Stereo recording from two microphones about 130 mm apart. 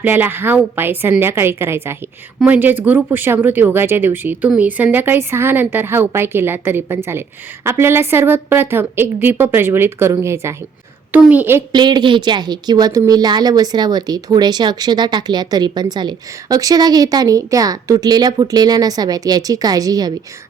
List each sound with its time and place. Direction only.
0.0 s a woman's voice: 15° right (ahead or behind)
11.7 s a woman's voice: 35° right (ahead or behind)